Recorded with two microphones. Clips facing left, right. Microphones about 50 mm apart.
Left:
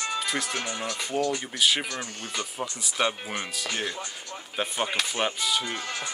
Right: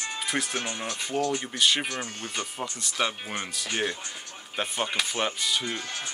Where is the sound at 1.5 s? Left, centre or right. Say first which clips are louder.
Even; centre.